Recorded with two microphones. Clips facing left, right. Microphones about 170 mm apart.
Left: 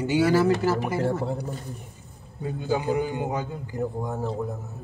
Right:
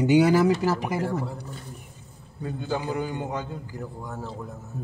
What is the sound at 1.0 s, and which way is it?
Speech, 25° left (ahead or behind).